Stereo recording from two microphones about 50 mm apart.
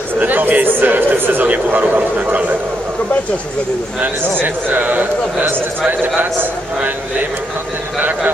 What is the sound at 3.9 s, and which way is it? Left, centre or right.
A man's voice, right.